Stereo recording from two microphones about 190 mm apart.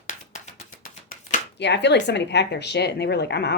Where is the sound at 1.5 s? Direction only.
65° left (ahead or behind).